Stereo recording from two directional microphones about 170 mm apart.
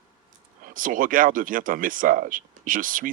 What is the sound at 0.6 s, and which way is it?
Speech, 55° right (ahead or behind).